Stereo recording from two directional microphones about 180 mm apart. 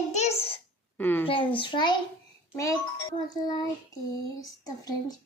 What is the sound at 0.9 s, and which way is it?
Speech, 10° left (ahead or behind).